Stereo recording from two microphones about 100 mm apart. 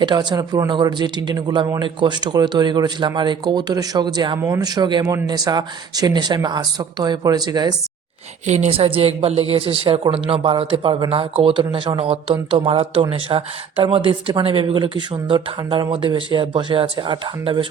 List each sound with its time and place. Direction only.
0.0 s speech: 45° right (ahead or behind)
1.8 s speech: 50° right (ahead or behind)
4.4 s speech: 35° right (ahead or behind)
8.5 s speech: 70° right (ahead or behind); by 17.7 s 55° right (ahead or behind)